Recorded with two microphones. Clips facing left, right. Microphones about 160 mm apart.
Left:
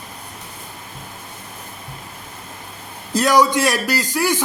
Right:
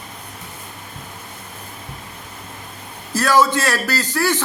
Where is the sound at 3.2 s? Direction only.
15° left (ahead or behind).